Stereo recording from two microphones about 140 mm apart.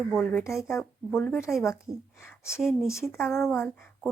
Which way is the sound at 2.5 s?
Centre (ahead or behind).